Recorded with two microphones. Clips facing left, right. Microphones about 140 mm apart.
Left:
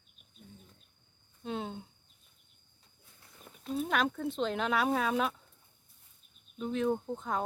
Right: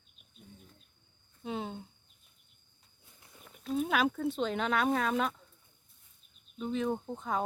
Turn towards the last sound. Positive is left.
turn(degrees=0)  # may be behind; listen again after turning